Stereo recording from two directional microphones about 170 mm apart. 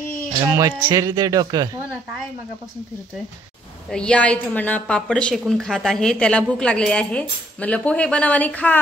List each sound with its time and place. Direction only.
0.4 s speech: 20° right (ahead or behind)
3.9 s a woman's voice: 5° left (ahead or behind)